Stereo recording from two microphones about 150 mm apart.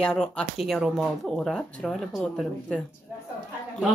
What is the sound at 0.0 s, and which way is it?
Speech, 5° left (ahead or behind).